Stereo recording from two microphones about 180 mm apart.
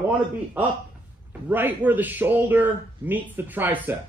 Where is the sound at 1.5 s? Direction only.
10° right (ahead or behind).